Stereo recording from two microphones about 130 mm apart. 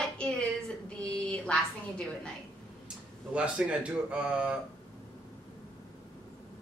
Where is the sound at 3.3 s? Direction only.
10° right (ahead or behind).